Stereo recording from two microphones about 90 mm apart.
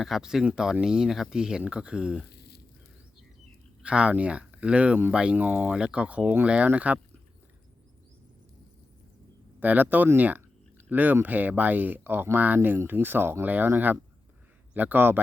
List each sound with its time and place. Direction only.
0.0 s speech: 5° right (ahead or behind)
3.8 s speech: 15° right (ahead or behind)
9.6 s speech: 20° right (ahead or behind)